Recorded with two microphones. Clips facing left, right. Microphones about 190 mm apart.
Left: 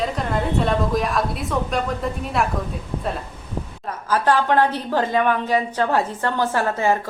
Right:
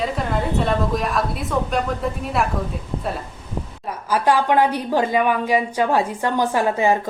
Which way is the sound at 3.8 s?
10° right (ahead or behind).